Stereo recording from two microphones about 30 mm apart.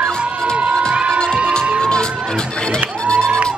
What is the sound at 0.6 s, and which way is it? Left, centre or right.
Crowd, right.